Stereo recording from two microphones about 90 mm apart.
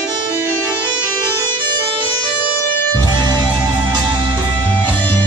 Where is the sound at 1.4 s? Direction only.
55° right (ahead or behind).